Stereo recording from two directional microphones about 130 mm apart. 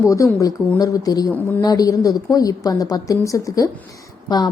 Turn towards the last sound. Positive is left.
turn(degrees=30)  # may be behind; listen again after turning